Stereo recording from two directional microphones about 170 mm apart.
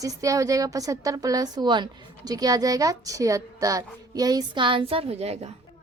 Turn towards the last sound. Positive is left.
turn(degrees=-40)  # may be behind; listen again after turning